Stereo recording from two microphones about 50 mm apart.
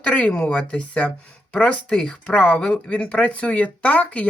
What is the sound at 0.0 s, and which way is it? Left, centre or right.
Speech, centre.